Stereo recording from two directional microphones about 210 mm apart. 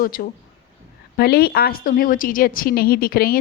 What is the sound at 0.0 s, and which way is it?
A woman's voice, 45° left (ahead or behind).